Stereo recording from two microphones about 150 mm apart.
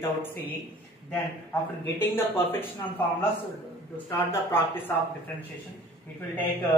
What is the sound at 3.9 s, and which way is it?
Speech, 15° left (ahead or behind).